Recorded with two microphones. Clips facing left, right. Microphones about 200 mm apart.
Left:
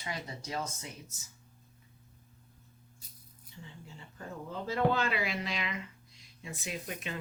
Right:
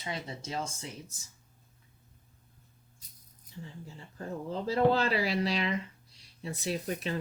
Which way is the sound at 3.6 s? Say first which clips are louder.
Right 4 dB; 35° right (ahead or behind).